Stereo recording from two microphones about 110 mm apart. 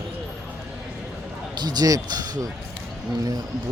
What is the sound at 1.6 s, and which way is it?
Speech, 40° right (ahead or behind).